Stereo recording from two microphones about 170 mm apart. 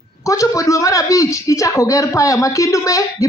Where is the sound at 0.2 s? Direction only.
20° left (ahead or behind).